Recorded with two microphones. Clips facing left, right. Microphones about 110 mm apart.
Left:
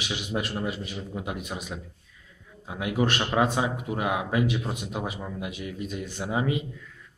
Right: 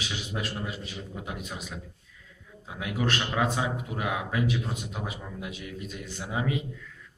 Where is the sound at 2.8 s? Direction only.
25° left (ahead or behind).